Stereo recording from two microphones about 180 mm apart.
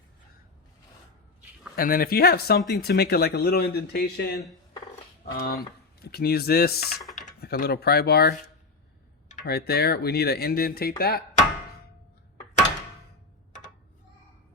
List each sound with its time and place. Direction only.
1.7 s speech: 55° left (ahead or behind)
5.4 s speech: 60° left (ahead or behind)
9.5 s speech: 60° left (ahead or behind)